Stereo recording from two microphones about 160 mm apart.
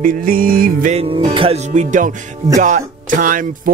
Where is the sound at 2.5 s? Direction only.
50° right (ahead or behind).